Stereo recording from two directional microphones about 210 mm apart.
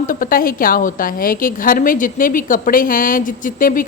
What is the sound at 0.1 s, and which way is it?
A woman's voice, 40° left (ahead or behind).